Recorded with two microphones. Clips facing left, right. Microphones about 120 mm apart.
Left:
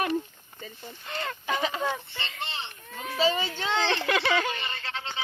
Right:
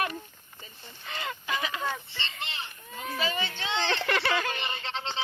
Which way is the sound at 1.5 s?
35° left (ahead or behind).